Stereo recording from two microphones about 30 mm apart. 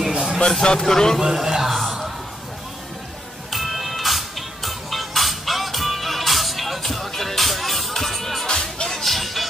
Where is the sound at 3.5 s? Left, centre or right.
Centre.